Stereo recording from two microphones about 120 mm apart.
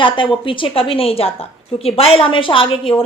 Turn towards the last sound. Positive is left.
turn(degrees=45)  # may be behind; listen again after turning